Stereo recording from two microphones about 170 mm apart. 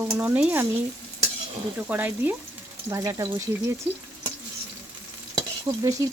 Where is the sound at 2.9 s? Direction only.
20° right (ahead or behind).